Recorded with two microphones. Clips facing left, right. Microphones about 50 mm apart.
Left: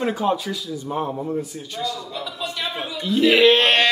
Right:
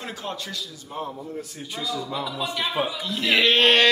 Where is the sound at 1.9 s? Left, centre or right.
Right.